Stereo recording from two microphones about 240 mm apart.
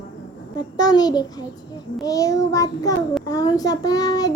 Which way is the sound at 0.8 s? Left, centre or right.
Centre.